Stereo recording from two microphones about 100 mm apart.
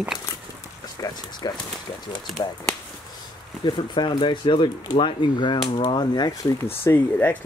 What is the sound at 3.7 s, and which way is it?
Speech, 50° left (ahead or behind).